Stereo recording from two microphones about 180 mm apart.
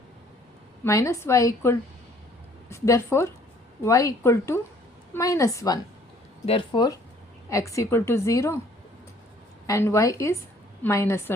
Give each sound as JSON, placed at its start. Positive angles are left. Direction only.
{"t": 0.9, "sound": "a woman's voice", "side_deg": 15}
{"t": 6.4, "sound": "speech", "side_deg": 35}
{"t": 7.5, "sound": "a woman's voice", "side_deg": 15}
{"t": 9.6, "sound": "a woman's voice", "side_deg": 15}